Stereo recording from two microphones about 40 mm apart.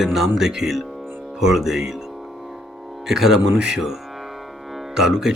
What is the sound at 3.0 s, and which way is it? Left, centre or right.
Speech, centre.